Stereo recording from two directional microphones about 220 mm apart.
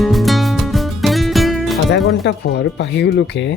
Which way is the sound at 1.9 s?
50° left (ahead or behind).